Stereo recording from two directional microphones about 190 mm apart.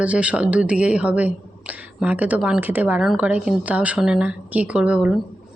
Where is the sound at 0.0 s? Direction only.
5° right (ahead or behind).